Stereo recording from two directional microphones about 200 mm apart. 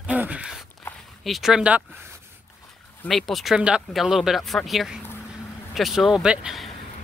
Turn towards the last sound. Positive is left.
turn(degrees=-5)  # may be behind; listen again after turning